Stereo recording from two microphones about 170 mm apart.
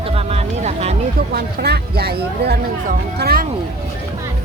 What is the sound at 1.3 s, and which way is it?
Speech, 65° right (ahead or behind).